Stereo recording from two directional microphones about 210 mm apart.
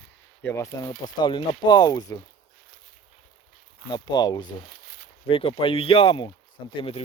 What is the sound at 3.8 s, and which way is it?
Speech, 20° left (ahead or behind).